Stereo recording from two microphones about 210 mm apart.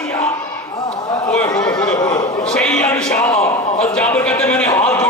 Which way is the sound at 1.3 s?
5° left (ahead or behind).